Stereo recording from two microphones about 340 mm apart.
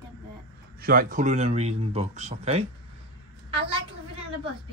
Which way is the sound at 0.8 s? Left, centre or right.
Right.